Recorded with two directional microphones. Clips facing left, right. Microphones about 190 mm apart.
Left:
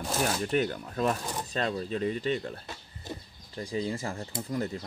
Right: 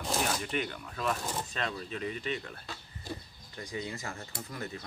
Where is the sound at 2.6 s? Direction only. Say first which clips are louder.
Left 1 dB; 20° left (ahead or behind).